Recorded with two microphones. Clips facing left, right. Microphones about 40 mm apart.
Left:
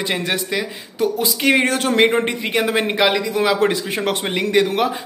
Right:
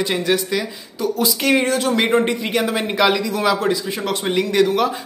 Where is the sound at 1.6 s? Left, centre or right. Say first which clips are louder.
Even; left.